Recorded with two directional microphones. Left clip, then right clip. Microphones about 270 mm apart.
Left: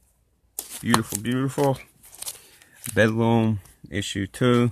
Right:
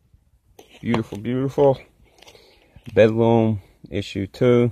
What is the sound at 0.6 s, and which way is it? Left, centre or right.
Shuffling cards, left.